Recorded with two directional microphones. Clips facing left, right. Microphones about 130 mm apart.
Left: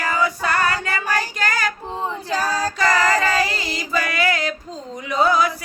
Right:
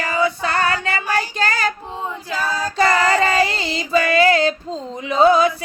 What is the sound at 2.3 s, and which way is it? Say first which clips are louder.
Female singing: left 1 dB; 40° left (ahead or behind).